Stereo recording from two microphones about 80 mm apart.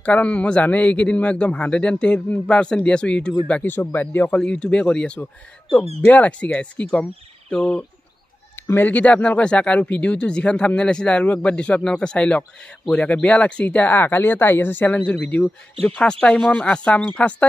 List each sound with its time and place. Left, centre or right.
0.0 s speech: centre
4.4 s speech: centre